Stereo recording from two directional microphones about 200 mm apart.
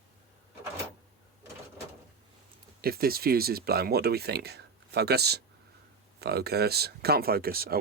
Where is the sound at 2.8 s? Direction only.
50° right (ahead or behind).